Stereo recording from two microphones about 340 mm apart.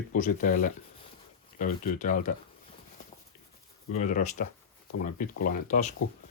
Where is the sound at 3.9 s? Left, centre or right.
Left.